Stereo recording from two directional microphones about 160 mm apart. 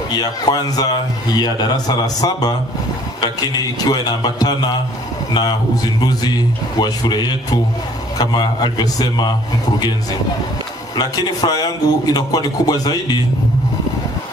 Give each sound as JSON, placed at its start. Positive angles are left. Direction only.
{"t": 0.1, "sound": "speech", "side_deg": 25}
{"t": 5.9, "sound": "speech", "side_deg": 25}
{"t": 11.0, "sound": "speech", "side_deg": 25}